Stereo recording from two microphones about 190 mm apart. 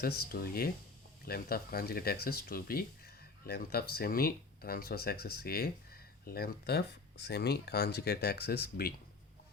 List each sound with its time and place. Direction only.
0.0 s speech: 55° left (ahead or behind)